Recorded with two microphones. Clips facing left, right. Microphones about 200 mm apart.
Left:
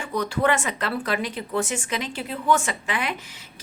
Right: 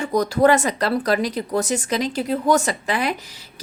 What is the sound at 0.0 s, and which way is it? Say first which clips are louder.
A woman's voice: right 7 dB; 40° right (ahead or behind).